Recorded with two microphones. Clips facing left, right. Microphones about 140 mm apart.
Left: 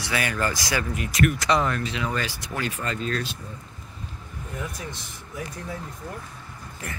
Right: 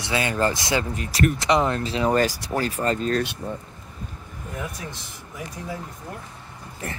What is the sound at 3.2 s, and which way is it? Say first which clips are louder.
Speech: right 7 dB; 65° right (ahead or behind).